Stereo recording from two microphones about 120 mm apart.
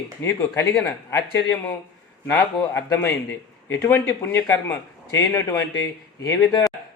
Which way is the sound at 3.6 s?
20° left (ahead or behind).